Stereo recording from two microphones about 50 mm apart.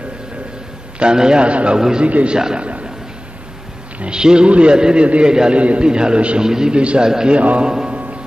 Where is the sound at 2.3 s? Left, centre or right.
Centre.